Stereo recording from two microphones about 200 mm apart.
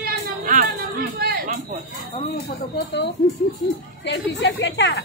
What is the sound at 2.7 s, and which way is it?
A woman's voice, 55° left (ahead or behind).